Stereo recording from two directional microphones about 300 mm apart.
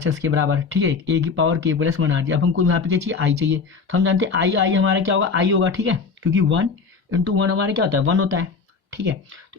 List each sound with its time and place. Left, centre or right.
0.1 s speech: right